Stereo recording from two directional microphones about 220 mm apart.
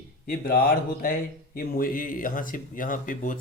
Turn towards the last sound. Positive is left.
turn(degrees=35)  # may be behind; listen again after turning